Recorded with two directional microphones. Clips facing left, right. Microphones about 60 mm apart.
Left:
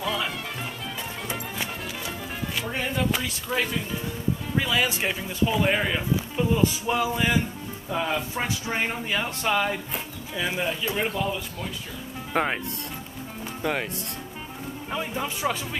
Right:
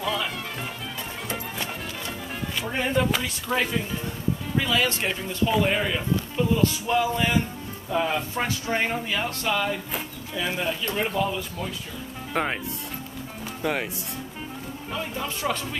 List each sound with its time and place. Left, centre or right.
0.0 s music: centre
2.7 s speech: centre
4.6 s speech: centre
7.9 s speech: centre
8.5 s speech: centre
13.6 s speech: centre
14.9 s speech: centre